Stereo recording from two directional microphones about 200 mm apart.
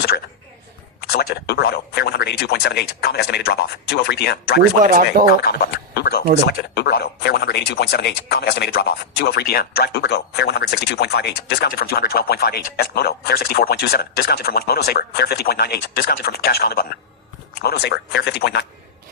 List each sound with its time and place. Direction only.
1.1 s speech: 50° left (ahead or behind)
4.8 s speech: 45° right (ahead or behind)
5.3 s a man's voice: 55° left (ahead or behind)